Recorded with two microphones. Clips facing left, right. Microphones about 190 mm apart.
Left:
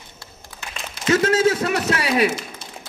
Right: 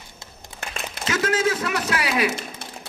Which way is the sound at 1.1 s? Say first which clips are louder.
Left 5 dB; 30° left (ahead or behind).